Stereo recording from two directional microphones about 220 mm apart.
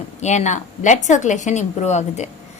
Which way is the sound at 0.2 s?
30° left (ahead or behind).